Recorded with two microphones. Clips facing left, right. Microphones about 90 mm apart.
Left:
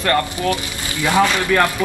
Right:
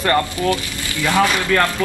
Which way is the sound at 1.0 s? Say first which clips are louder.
Left 1 dB; 20° left (ahead or behind).